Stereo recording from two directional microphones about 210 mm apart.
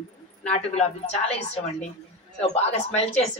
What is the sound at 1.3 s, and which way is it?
Speech, 30° left (ahead or behind).